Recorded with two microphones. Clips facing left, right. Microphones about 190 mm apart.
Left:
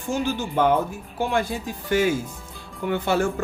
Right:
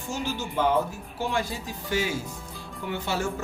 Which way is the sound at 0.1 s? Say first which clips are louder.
Left 6 dB; 55° left (ahead or behind).